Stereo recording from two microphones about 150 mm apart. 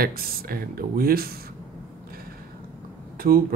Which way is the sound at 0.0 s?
80° right.